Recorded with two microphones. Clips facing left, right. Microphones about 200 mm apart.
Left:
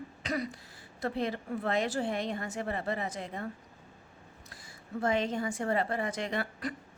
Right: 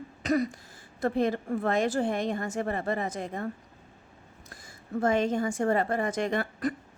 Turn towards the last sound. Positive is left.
turn(degrees=-50)  # may be behind; listen again after turning